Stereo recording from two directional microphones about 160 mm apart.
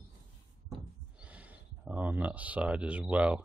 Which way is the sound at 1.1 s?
10° right (ahead or behind).